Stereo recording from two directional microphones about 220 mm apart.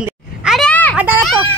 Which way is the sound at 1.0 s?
5° right (ahead or behind).